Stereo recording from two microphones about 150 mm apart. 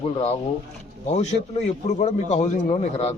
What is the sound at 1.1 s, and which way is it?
A man's voice, 45° left (ahead or behind).